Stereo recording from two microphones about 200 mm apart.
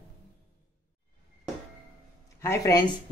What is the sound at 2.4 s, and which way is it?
Speech, 15° left (ahead or behind).